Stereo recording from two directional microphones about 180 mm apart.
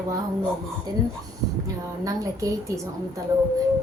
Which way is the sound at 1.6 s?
20° right (ahead or behind).